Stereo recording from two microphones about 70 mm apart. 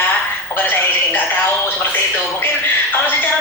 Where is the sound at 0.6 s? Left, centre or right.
Left.